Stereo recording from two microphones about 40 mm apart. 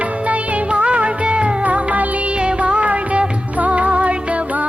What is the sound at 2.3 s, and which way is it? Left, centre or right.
Music, right.